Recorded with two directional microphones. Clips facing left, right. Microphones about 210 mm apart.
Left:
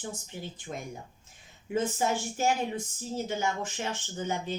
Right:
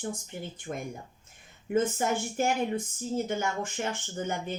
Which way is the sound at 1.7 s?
55° right (ahead or behind).